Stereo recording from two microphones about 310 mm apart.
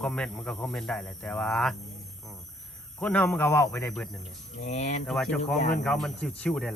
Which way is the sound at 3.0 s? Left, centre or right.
Centre.